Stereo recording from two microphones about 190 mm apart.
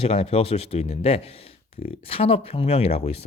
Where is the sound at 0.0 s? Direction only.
30° left (ahead or behind).